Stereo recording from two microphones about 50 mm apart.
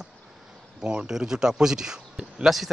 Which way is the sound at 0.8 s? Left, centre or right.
Centre.